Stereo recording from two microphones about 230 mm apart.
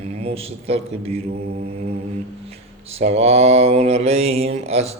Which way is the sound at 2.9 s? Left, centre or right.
Right.